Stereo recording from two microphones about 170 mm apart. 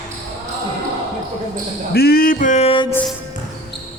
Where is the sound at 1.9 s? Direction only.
65° left (ahead or behind); by 2.8 s 35° left (ahead or behind).